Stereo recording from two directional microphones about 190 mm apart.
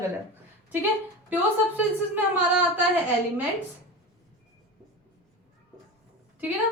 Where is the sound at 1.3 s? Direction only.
10° right (ahead or behind).